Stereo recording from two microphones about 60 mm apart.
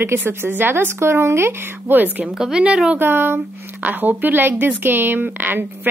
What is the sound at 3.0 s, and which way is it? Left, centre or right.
Speech, right.